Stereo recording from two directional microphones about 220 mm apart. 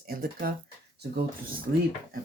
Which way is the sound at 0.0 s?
45° right (ahead or behind).